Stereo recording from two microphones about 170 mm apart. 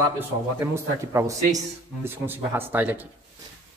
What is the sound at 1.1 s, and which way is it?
A man's voice, 20° right (ahead or behind).